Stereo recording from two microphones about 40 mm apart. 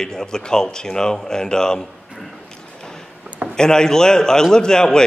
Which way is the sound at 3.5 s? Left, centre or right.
Centre.